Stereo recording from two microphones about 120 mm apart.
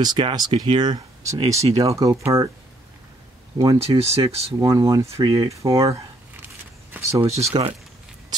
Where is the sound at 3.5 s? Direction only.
30° right (ahead or behind).